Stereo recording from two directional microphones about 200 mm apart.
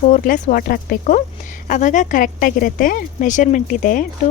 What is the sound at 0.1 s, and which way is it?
Speech, 40° left (ahead or behind).